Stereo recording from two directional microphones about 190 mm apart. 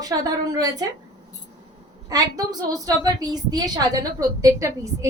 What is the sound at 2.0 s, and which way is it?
A woman's voice, 20° right (ahead or behind).